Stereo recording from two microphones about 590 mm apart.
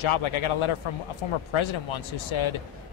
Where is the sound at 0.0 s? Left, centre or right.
Left.